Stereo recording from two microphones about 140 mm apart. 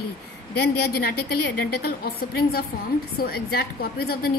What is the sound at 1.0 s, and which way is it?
A woman's voice, 90° left.